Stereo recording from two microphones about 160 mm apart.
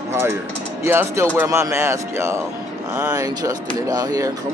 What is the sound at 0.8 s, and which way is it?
Speech, 15° right (ahead or behind).